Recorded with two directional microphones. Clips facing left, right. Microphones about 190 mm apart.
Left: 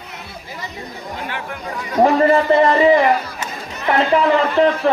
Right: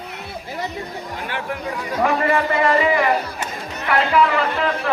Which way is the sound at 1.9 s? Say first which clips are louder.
Left 6 dB; 35° left (ahead or behind).